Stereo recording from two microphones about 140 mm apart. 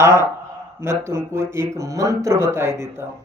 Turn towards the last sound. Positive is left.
turn(degrees=-20)  # may be behind; listen again after turning